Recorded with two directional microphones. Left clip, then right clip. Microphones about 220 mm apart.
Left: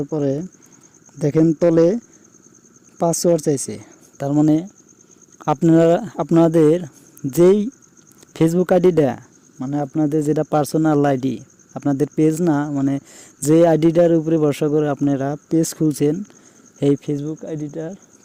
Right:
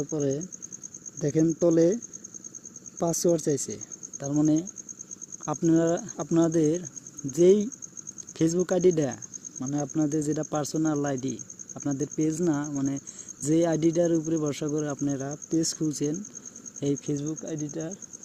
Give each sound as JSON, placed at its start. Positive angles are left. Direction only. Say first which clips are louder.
{"t": 0.0, "sound": "speech", "louder": "left 7 dB", "side_deg": 45}
{"t": 3.0, "sound": "speech", "louder": "left 8 dB", "side_deg": 45}